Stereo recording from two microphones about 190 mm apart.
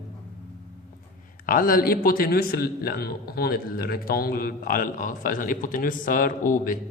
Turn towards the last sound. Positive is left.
turn(degrees=45)  # may be behind; listen again after turning